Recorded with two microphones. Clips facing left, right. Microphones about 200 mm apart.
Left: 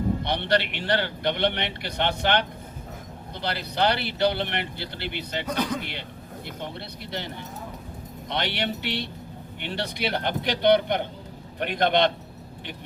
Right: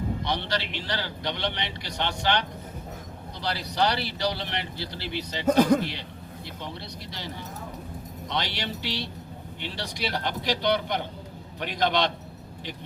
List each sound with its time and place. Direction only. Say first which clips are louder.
0.3 s speech: left 5 dB; 60° left (ahead or behind)
5.5 s a man's voice: right 9 dB; 50° right (ahead or behind)
5.8 s speech: right 3 dB; 60° left (ahead or behind)
8.3 s speech: left 3 dB; 55° left (ahead or behind)